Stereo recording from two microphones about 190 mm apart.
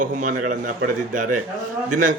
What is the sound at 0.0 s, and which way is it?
A man's voice, 40° right (ahead or behind).